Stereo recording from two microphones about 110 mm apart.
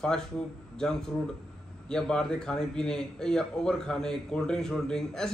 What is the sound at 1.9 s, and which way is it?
A man's voice, 5° left (ahead or behind).